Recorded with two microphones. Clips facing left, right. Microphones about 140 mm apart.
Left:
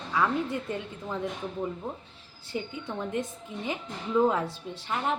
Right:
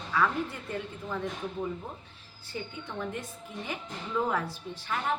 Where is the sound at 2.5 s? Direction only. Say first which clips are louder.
Left 4 dB; 20° left (ahead or behind).